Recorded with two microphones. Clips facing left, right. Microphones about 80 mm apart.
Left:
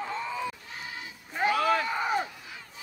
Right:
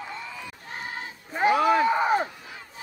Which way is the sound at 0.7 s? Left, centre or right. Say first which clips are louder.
Right 5 dB; right.